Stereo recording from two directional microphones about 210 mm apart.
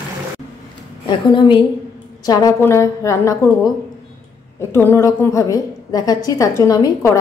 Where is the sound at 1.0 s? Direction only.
20° left (ahead or behind).